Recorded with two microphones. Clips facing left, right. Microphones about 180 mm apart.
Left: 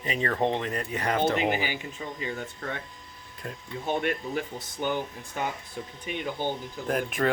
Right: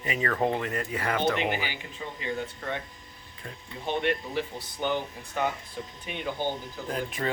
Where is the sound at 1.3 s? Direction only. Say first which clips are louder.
Left 3 dB; 40° left (ahead or behind).